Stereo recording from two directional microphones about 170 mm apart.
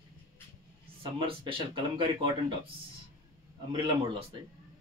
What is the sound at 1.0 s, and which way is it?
Speech, 30° right (ahead or behind).